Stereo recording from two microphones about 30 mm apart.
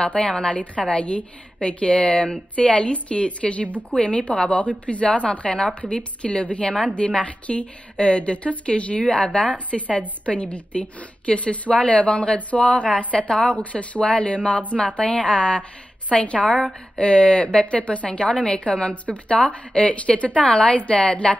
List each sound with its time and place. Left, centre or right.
0.0 s a woman's voice: left
6.7 s a woman's voice: left
7.0 s a woman's voice: left
9.7 s a woman's voice: centre
10.2 s a woman's voice: left
12.6 s a woman's voice: left
13.6 s a woman's voice: left
17.7 s a woman's voice: left